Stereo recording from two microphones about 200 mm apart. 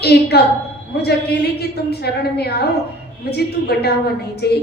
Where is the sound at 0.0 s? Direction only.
55° left (ahead or behind).